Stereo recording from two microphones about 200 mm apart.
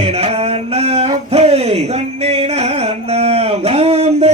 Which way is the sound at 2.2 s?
30° right (ahead or behind).